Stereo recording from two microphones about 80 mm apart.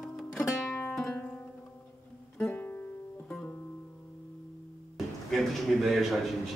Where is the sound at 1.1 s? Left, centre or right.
Centre.